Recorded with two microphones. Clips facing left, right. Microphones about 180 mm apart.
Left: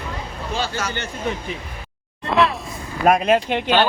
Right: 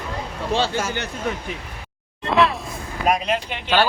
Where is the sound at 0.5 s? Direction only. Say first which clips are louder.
Right 4 dB; 30° right (ahead or behind).